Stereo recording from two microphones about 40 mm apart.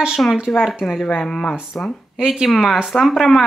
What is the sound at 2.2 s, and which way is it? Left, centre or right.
Speech, centre.